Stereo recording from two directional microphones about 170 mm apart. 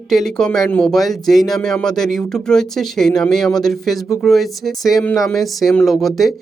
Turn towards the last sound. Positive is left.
turn(degrees=0)  # may be behind; listen again after turning